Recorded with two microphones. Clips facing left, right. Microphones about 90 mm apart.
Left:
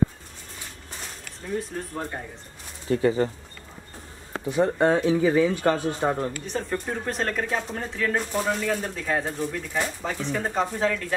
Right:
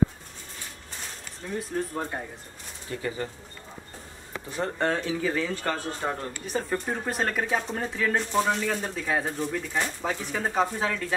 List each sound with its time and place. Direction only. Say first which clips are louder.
1.5 s speech: even; centre (ahead or behind)
2.9 s speech: left 10 dB; 35° left (ahead or behind)
4.5 s speech: left 7 dB; 15° left (ahead or behind)
6.4 s speech: even; 5° right (ahead or behind)